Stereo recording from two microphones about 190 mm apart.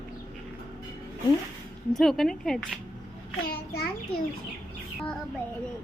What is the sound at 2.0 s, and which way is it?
Speech, centre (ahead or behind).